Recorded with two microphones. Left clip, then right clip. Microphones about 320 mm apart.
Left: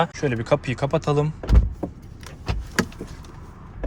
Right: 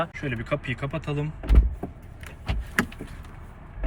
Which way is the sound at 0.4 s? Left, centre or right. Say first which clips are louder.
Left 8 dB; centre.